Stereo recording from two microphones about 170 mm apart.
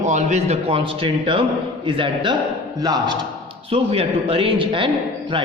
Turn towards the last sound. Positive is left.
turn(degrees=-30)  # may be behind; listen again after turning